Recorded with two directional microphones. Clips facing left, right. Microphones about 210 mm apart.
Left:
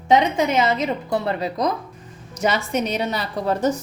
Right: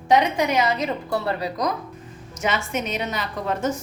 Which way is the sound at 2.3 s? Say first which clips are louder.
Left 4 dB; 35° left (ahead or behind).